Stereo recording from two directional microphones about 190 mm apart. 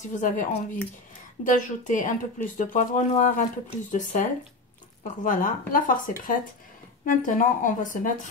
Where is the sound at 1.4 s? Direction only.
45° left (ahead or behind).